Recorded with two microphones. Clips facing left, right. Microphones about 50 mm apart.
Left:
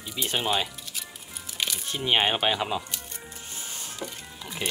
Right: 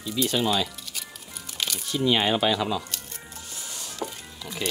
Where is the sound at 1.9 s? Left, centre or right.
Left.